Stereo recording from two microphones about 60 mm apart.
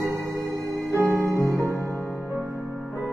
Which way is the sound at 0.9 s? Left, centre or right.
Right.